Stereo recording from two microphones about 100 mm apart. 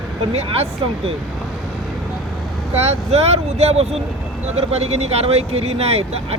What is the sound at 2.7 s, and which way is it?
A man's voice, 90° right.